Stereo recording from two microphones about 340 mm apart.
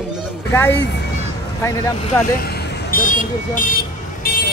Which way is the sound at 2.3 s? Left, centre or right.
Left.